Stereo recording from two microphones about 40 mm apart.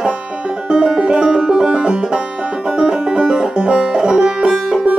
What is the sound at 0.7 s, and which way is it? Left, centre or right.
Music, right.